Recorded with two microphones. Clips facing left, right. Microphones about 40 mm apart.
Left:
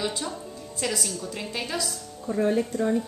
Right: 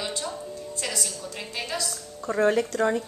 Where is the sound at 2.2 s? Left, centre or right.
Right.